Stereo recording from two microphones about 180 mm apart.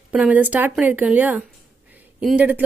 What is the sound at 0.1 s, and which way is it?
Speech, 5° right (ahead or behind).